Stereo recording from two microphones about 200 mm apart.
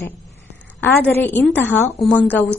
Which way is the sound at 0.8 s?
10° left (ahead or behind).